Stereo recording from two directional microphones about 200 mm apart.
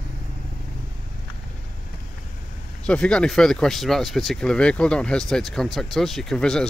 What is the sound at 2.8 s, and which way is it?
Speech, 5° left (ahead or behind).